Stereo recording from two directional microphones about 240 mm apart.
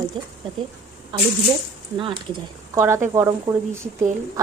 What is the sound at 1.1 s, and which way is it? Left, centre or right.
Speech, centre.